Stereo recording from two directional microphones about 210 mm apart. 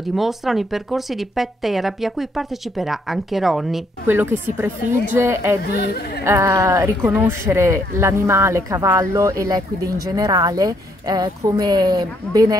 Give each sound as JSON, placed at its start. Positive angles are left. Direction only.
{"t": 0.1, "sound": "speech", "side_deg": 0}